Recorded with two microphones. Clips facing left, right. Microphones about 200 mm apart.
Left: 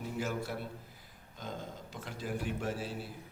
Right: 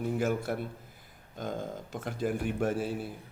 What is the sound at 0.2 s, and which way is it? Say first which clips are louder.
Speech: right 6 dB; 50° right (ahead or behind).